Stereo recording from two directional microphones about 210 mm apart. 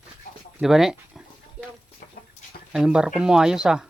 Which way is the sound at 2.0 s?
45° left (ahead or behind).